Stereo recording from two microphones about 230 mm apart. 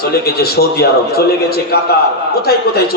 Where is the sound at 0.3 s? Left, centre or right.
Left.